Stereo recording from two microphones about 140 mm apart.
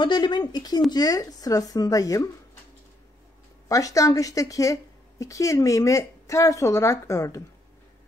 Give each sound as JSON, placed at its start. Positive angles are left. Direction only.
{"t": 0.0, "sound": "a woman's voice", "side_deg": 35}
{"t": 3.6, "sound": "speech", "side_deg": 25}